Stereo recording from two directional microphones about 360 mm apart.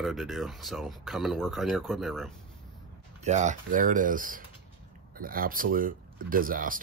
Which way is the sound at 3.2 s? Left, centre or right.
Centre.